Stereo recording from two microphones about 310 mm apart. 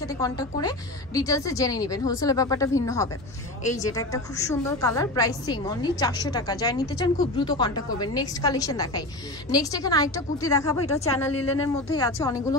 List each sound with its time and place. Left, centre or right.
0.0 s a woman's voice: centre
11.4 s speech: left
11.9 s a woman's voice: centre